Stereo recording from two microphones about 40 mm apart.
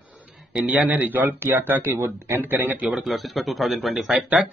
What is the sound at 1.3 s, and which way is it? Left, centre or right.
Speech, right.